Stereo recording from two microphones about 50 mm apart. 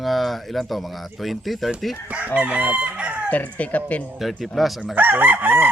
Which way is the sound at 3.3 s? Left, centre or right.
Left.